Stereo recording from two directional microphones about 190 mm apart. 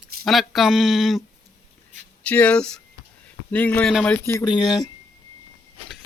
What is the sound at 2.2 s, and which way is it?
Speech, 5° left (ahead or behind).